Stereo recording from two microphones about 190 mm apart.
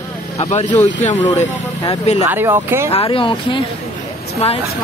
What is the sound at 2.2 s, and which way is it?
Speech, 10° right (ahead or behind).